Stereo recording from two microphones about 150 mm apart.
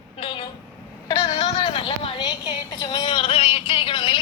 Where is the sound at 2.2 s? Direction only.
25° left (ahead or behind).